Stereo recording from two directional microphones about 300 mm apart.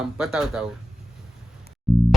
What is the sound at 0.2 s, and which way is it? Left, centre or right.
Speech, centre.